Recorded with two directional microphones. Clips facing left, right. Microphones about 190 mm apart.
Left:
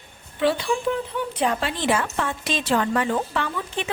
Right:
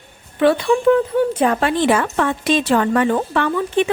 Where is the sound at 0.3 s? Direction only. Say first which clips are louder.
Right 7 dB; 55° right (ahead or behind).